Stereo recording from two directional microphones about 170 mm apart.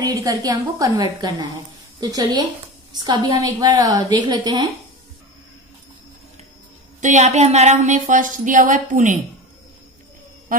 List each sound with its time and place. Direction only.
0.0 s a woman's voice: 20° right (ahead or behind)
7.0 s a woman's voice: 45° right (ahead or behind)